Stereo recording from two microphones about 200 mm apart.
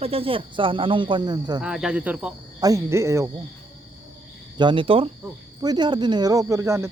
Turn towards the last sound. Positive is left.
turn(degrees=-15)  # may be behind; listen again after turning